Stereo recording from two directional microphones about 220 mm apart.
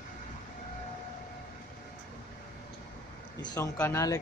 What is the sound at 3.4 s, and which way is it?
Speech, 15° left (ahead or behind).